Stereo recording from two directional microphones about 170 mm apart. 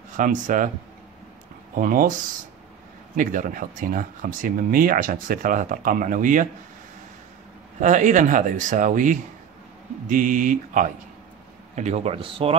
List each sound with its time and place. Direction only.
0.2 s speech: 50° right (ahead or behind)
1.8 s speech: 55° right (ahead or behind)
3.2 s speech: 55° right (ahead or behind)
7.8 s speech: 45° right (ahead or behind)